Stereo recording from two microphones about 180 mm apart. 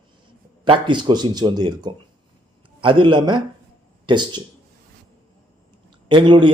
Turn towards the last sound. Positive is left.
turn(degrees=-25)  # may be behind; listen again after turning